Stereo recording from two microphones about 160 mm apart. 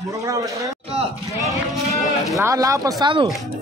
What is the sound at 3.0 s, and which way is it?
Speech, 30° right (ahead or behind).